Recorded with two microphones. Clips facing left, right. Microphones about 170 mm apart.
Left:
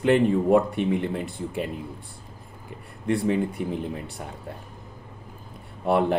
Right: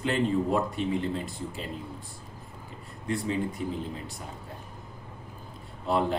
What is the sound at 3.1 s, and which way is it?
Speech, 60° left (ahead or behind).